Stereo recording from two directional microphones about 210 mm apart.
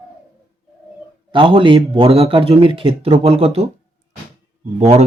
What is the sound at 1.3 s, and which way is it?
A man's voice, 25° right (ahead or behind).